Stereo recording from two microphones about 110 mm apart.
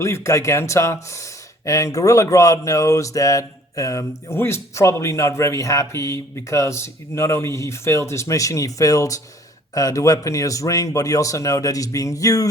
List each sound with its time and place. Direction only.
0.0 s speech: 25° left (ahead or behind)